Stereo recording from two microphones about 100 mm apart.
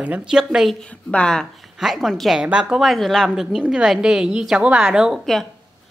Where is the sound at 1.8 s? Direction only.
5° right (ahead or behind).